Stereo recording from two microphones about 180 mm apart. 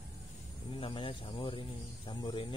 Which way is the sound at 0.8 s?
30° left (ahead or behind).